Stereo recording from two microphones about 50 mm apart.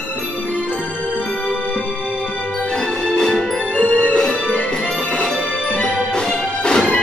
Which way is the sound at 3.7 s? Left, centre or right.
Left.